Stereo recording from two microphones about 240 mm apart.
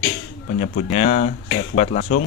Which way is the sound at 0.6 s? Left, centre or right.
Left.